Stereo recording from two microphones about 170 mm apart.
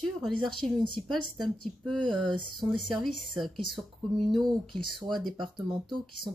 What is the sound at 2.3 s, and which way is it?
Speech, 25° right (ahead or behind).